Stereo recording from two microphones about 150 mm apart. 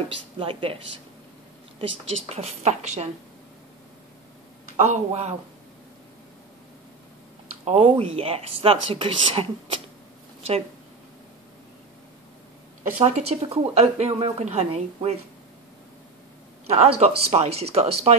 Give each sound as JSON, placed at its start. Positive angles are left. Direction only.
{"t": 0.4, "sound": "speech", "side_deg": -40}
{"t": 1.8, "sound": "speech", "side_deg": -45}
{"t": 4.7, "sound": "speech", "side_deg": -50}
{"t": 7.6, "sound": "speech", "side_deg": -40}
{"t": 13.0, "sound": "speech", "side_deg": -45}
{"t": 16.6, "sound": "speech", "side_deg": -45}